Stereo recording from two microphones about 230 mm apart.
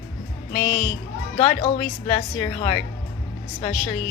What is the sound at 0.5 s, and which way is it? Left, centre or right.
Speech, left.